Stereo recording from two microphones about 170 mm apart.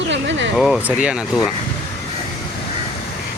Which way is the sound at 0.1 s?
90° right.